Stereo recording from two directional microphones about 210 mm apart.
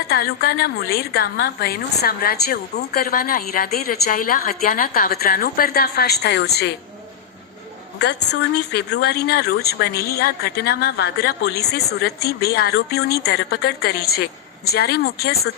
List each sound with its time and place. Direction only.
0.1 s a woman's voice: 45° left (ahead or behind)
7.9 s a woman's voice: 55° left (ahead or behind)